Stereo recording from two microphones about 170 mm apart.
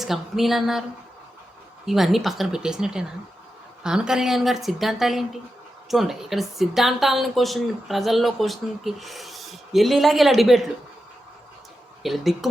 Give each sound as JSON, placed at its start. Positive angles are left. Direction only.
{"t": 0.0, "sound": "speech", "side_deg": 0}
{"t": 1.9, "sound": "speech", "side_deg": 0}
{"t": 12.0, "sound": "speech", "side_deg": 0}